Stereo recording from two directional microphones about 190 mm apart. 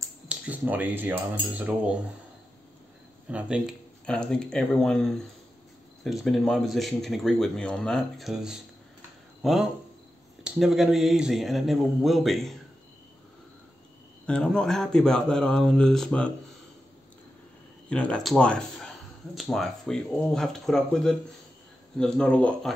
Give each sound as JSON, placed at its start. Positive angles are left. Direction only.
{"t": 0.3, "sound": "speech", "side_deg": -10}
{"t": 1.5, "sound": "cutlery", "side_deg": -10}
{"t": 3.3, "sound": "speech", "side_deg": -5}
{"t": 4.0, "sound": "speech", "side_deg": 5}
{"t": 14.2, "sound": "speech", "side_deg": 5}
{"t": 17.8, "sound": "speech", "side_deg": 5}